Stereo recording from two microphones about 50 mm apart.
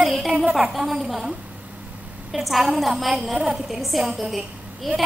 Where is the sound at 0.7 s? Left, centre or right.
Centre.